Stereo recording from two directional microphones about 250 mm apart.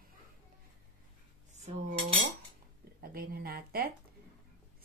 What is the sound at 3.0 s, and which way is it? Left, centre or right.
Speech, right.